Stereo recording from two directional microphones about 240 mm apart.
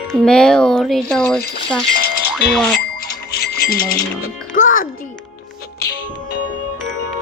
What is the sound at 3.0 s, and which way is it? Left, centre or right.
Music, left.